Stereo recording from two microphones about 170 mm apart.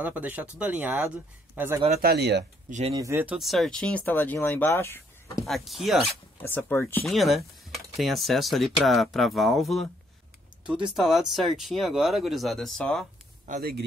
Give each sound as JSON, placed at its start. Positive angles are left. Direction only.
{"t": 0.0, "sound": "speech", "side_deg": -10}
{"t": 2.0, "sound": "speech", "side_deg": -70}
{"t": 2.9, "sound": "speech", "side_deg": -20}
{"t": 3.3, "sound": "speech", "side_deg": 0}
{"t": 5.4, "sound": "speech", "side_deg": 0}
{"t": 6.5, "sound": "speech", "side_deg": 10}
{"t": 7.1, "sound": "speech", "side_deg": 0}
{"t": 13.5, "sound": "speech", "side_deg": -65}